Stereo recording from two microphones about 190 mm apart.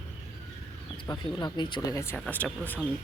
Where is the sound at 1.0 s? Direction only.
20° left (ahead or behind).